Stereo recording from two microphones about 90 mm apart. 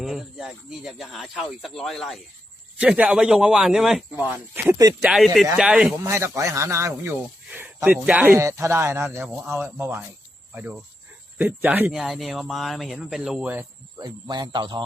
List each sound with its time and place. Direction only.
0.0 s speech: 5° right (ahead or behind)
2.7 s a man's voice: 15° right (ahead or behind)
4.2 s a man's voice: 15° right (ahead or behind)
5.1 s a man's voice: centre (ahead or behind)
6.0 s speech: 30° right (ahead or behind)
8.4 s speech: 35° right (ahead or behind)
11.9 s speech: 5° right (ahead or behind)
14.0 s speech: 50° right (ahead or behind)